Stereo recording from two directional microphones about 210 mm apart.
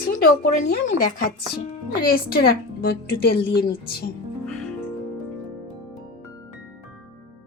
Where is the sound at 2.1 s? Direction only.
45° left (ahead or behind).